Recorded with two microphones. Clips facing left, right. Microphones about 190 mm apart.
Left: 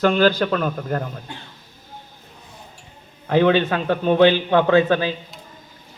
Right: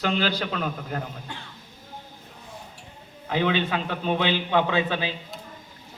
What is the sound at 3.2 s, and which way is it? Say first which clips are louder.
A man's voice: left 8 dB; 50° left (ahead or behind).